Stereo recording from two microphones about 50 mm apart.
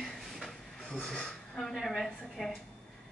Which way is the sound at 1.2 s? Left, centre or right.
Centre.